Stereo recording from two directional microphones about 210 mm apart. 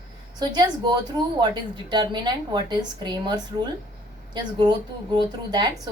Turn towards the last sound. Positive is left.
turn(degrees=-20)  # may be behind; listen again after turning